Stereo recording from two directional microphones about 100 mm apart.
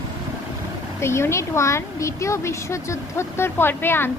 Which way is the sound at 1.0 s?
25° left (ahead or behind).